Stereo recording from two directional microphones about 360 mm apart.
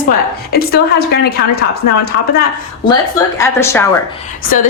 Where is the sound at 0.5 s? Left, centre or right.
Left.